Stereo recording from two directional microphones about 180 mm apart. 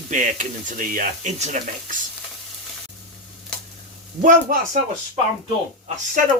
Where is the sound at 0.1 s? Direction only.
45° right (ahead or behind).